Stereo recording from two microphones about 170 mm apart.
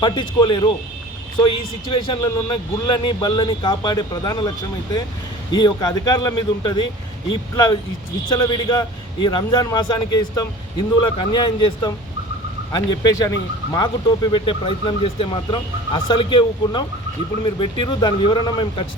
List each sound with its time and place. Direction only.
0.0 s a man's voice: 25° left (ahead or behind)
14.3 s a man's voice: 30° left (ahead or behind)